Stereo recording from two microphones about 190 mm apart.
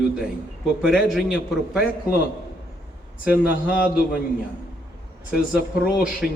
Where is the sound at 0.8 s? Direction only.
5° right (ahead or behind).